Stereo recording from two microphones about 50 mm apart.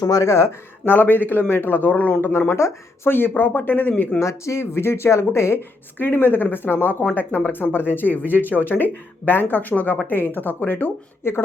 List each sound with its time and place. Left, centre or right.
0.2 s speech: left
0.9 s speech: left
2.6 s speech: left
3.1 s speech: left
4.2 s speech: left
6.0 s speech: left